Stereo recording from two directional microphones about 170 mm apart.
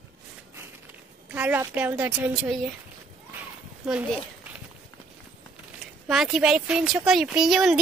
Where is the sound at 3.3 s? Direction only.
10° right (ahead or behind).